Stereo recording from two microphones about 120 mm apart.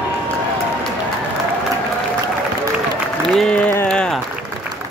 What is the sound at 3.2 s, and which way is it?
Applause, centre (ahead or behind).